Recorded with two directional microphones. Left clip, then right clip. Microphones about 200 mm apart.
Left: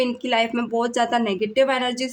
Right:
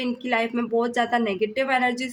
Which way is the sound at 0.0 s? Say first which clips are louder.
Left 4 dB; 25° left (ahead or behind).